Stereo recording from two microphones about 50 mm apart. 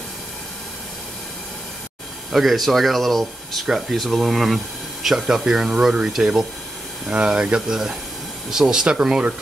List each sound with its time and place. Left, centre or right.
2.3 s speech: centre